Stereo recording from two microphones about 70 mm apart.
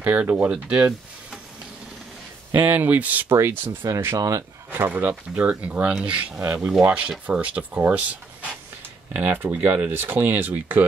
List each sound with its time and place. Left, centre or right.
0.0 s speech: right
2.5 s speech: right
3.3 s speech: right
4.2 s speech: right
4.6 s speech: right